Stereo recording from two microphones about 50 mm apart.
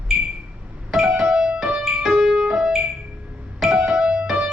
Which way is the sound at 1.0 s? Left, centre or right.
Centre.